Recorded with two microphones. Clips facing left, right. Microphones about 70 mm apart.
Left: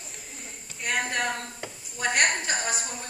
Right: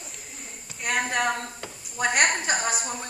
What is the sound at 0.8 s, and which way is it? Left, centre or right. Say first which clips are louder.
Speech: right 3 dB; centre.